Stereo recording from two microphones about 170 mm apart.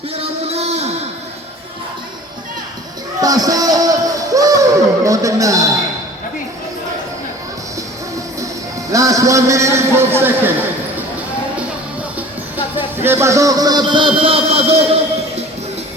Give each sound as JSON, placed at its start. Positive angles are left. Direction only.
{"t": 0.2, "sound": "music", "side_deg": -40}
{"t": 3.2, "sound": "a sound", "side_deg": -20}
{"t": 8.9, "sound": "a man's voice", "side_deg": -20}
{"t": 12.7, "sound": "a man's voice", "side_deg": -15}